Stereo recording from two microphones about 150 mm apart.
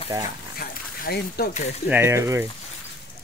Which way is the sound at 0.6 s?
80° left.